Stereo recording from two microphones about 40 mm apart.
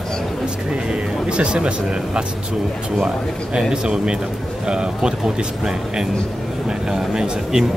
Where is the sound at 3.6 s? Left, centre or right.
Right.